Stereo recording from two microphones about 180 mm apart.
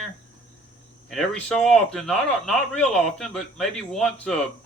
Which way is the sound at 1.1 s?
5° left (ahead or behind).